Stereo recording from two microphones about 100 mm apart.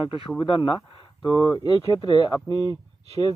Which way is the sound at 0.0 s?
65° left (ahead or behind).